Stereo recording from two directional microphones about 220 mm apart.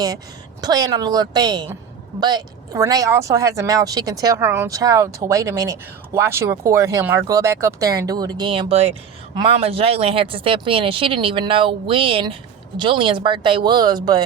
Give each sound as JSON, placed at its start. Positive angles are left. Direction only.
{"t": 0.6, "sound": "speech", "side_deg": -15}